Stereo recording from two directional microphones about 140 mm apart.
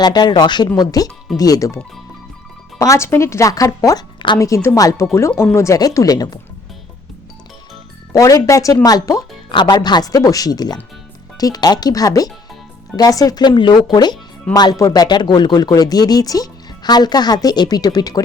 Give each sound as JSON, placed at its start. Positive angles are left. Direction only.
{"t": 0.0, "sound": "speech", "side_deg": 30}
{"t": 8.1, "sound": "speech", "side_deg": 25}